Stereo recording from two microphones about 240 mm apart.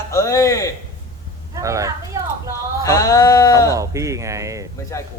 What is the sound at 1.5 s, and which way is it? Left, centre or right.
Speech, centre.